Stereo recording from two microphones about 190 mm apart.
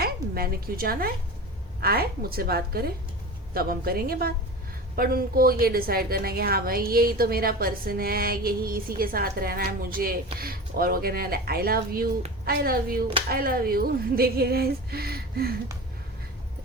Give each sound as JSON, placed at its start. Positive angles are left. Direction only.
{"t": 0.0, "sound": "a woman's voice", "side_deg": -55}